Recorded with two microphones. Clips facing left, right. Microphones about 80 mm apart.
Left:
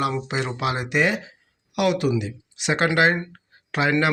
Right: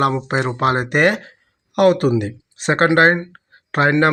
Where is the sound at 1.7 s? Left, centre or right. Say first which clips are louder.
Right 7 dB; right.